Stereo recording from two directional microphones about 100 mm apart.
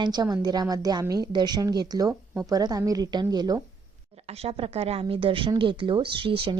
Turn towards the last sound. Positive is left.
turn(degrees=-60)  # may be behind; listen again after turning